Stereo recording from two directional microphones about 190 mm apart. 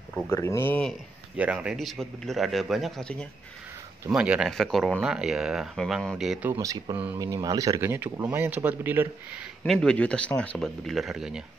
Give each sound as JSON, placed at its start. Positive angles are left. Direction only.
{"t": 0.3, "sound": "speech", "side_deg": 15}
{"t": 1.3, "sound": "speech", "side_deg": -5}
{"t": 9.6, "sound": "speech", "side_deg": 5}